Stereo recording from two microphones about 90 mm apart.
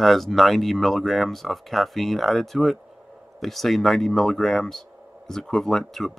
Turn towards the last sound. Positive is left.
turn(degrees=5)  # may be behind; listen again after turning